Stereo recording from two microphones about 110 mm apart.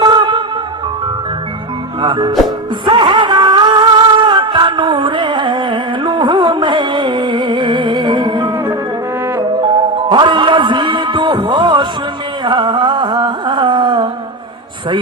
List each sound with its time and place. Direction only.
0.0 s music: 45° right (ahead or behind)
2.0 s speech: 45° right (ahead or behind)
2.8 s music: 45° right (ahead or behind)
10.1 s music: 45° right (ahead or behind)
12.5 s carnatic music: 45° right (ahead or behind)